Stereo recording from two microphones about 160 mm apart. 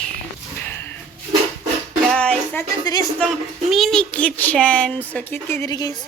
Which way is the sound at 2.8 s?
25° left (ahead or behind).